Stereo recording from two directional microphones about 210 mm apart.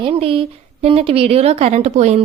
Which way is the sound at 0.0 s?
25° right (ahead or behind).